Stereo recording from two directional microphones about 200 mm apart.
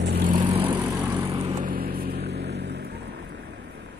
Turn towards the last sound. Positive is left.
turn(degrees=-55)  # may be behind; listen again after turning